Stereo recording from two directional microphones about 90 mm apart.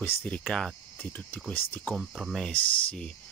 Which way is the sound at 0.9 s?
20° left (ahead or behind).